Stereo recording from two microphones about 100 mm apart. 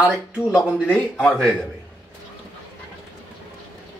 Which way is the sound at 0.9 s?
15° left (ahead or behind).